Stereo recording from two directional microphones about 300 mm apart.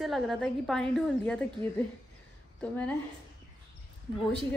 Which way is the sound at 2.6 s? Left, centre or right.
Centre.